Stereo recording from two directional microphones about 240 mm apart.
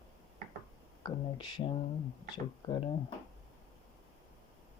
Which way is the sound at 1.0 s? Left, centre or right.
Centre.